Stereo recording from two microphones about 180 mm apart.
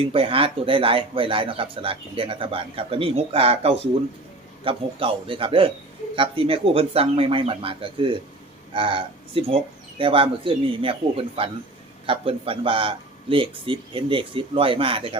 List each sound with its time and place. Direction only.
0.0 s speech: 30° right (ahead or behind)